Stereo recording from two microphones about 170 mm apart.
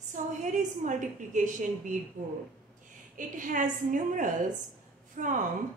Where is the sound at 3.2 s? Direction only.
50° right (ahead or behind).